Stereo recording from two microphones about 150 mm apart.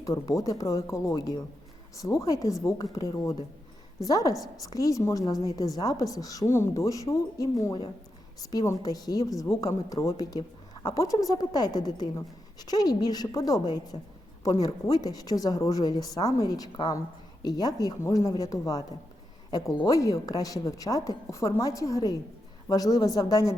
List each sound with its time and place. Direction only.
0.0 s speech: 20° left (ahead or behind)